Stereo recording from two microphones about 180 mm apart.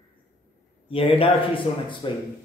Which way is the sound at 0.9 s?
30° left (ahead or behind).